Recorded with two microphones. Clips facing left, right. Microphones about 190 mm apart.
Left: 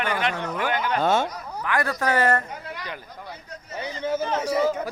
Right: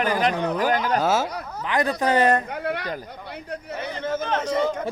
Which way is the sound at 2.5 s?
65° right (ahead or behind).